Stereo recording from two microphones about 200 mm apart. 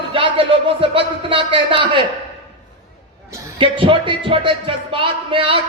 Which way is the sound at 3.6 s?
25° right (ahead or behind).